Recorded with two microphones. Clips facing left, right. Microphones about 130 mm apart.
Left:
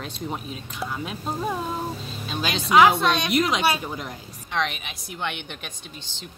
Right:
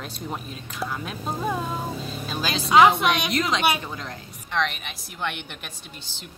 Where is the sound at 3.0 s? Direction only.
15° right (ahead or behind).